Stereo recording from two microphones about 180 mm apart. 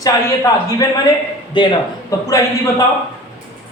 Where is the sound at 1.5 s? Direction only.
20° left (ahead or behind).